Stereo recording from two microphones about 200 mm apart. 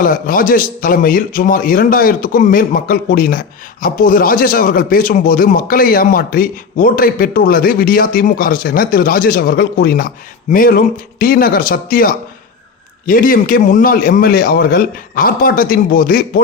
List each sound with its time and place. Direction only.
0.0 s speech: 45° left (ahead or behind)